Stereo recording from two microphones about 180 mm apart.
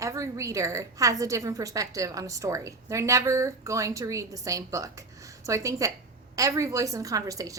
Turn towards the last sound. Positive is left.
turn(degrees=-20)  # may be behind; listen again after turning